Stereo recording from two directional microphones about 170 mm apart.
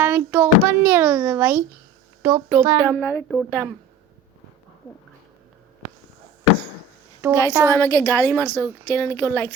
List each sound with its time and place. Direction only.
0.0 s a sound: 10° right (ahead or behind)
2.2 s a child's voice: 20° right (ahead or behind)
2.9 s speech: 10° left (ahead or behind)
3.5 s speech: 15° right (ahead or behind)
7.2 s speech: 10° right (ahead or behind)
7.7 s speech: 15° left (ahead or behind)